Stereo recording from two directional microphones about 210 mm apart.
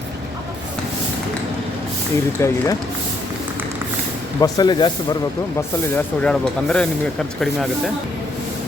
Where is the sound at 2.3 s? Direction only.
15° left (ahead or behind).